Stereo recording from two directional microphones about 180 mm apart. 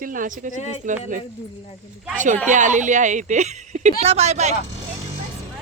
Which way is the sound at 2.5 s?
45° right (ahead or behind).